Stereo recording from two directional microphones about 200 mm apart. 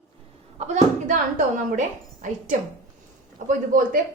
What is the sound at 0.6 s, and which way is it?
Speech, 40° right (ahead or behind).